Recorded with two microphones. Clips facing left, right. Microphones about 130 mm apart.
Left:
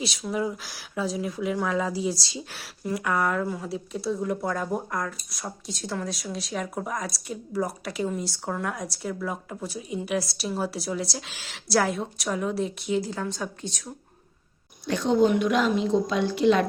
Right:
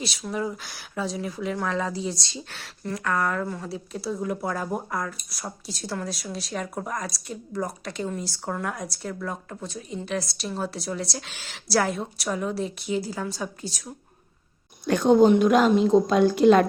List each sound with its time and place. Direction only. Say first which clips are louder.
0.0 s speech: left 1 dB; centre (ahead or behind)
14.8 s speech: right 4 dB; 50° right (ahead or behind)